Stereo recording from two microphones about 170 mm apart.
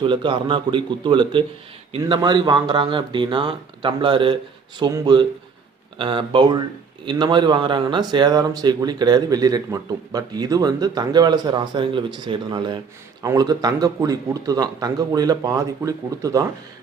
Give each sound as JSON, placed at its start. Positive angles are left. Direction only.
{"t": 0.0, "sound": "a man's voice", "side_deg": -30}